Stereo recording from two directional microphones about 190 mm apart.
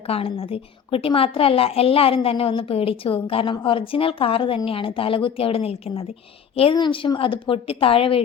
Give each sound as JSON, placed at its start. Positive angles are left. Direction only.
{"t": 0.1, "sound": "a woman's voice", "side_deg": 30}